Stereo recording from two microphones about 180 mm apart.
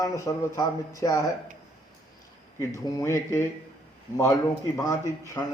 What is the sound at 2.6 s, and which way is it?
A man's voice, 15° left (ahead or behind).